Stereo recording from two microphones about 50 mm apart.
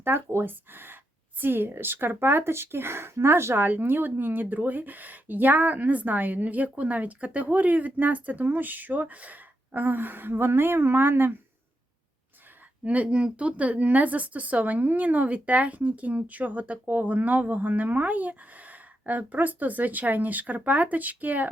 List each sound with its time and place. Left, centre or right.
0.0 s speech: right
3.6 s a woman's voice: right
12.8 s a woman's voice: right